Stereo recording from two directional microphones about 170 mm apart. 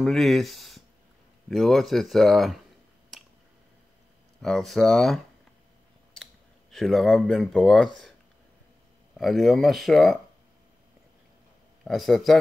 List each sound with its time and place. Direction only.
0.0 s speech: centre (ahead or behind)
4.4 s speech: centre (ahead or behind)
6.7 s speech: centre (ahead or behind)
9.1 s speech: centre (ahead or behind)
11.8 s speech: centre (ahead or behind)